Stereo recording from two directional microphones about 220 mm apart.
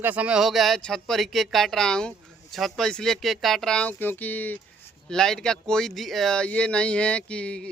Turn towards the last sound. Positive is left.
turn(degrees=5)  # may be behind; listen again after turning